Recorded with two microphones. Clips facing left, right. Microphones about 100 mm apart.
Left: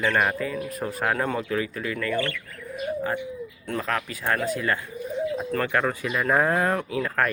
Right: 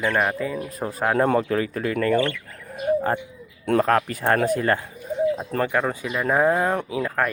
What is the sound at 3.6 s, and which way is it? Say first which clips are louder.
Speech: right 11 dB; 55° right (ahead or behind).